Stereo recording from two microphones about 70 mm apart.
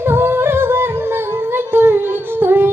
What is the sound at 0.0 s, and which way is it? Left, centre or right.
Music, right.